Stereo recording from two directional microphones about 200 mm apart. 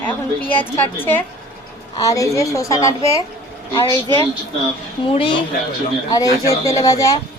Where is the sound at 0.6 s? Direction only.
10° left (ahead or behind).